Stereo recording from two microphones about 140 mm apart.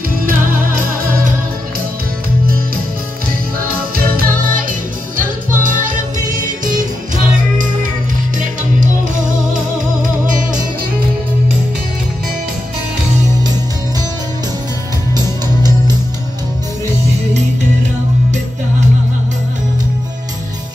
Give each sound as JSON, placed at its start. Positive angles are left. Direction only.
{"t": 0.5, "sound": "music", "side_deg": -85}
{"t": 3.6, "sound": "music", "side_deg": -90}
{"t": 8.4, "sound": "music", "side_deg": -70}
{"t": 15.1, "sound": "music", "side_deg": -30}